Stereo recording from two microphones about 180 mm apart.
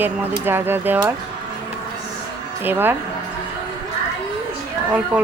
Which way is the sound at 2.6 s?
10° right (ahead or behind).